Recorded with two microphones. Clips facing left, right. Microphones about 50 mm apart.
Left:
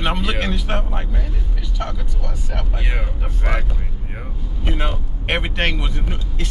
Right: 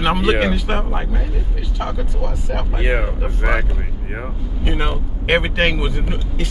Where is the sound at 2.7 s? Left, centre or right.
Right.